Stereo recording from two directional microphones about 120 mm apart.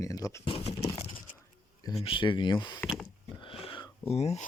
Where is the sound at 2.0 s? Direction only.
45° left (ahead or behind).